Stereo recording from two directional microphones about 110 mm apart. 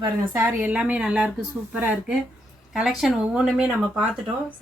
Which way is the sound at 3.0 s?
5° right (ahead or behind).